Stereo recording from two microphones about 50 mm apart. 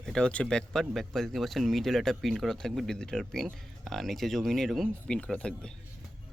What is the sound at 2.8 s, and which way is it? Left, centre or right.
Speech, centre.